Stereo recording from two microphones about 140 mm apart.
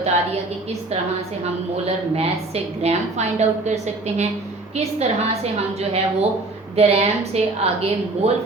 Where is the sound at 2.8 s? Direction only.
50° right (ahead or behind).